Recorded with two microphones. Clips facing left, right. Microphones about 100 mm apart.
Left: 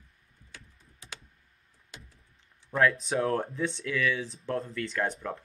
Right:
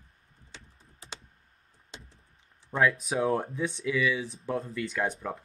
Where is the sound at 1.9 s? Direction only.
25° right (ahead or behind).